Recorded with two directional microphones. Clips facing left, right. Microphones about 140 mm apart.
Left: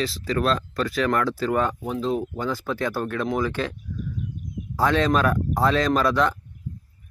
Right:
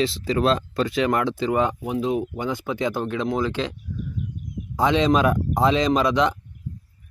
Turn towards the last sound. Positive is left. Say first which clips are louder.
# right 1 dB
turn(degrees=-20)  # may be behind; listen again after turning